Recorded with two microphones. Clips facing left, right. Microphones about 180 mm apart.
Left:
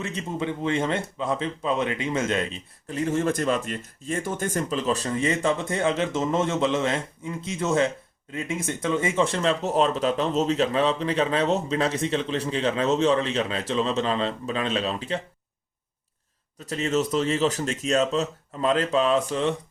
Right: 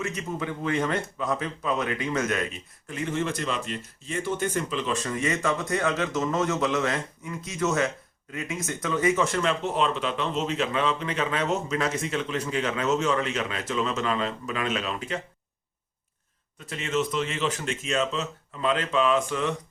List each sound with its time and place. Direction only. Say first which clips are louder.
0.0 s speech: left 2 dB; 30° left (ahead or behind)
16.6 s speech: left 3 dB; 35° left (ahead or behind)